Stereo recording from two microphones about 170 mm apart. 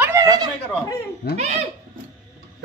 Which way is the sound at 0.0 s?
20° right (ahead or behind).